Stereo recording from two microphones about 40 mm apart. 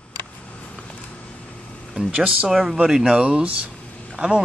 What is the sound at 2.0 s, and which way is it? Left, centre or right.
Speech, centre.